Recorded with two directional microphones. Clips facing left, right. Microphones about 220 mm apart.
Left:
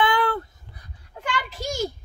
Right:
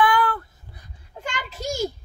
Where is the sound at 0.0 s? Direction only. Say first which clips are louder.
Right 1 dB; 25° left (ahead or behind).